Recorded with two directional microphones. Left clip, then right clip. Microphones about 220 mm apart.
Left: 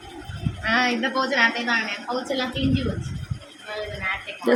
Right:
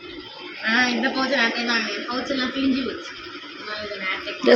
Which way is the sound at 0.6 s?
30° left (ahead or behind).